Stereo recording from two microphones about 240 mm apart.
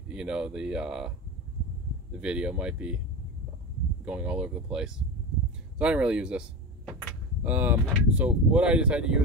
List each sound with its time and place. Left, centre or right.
0.1 s speech: centre
2.1 s speech: centre
4.0 s speech: centre
7.4 s speech: centre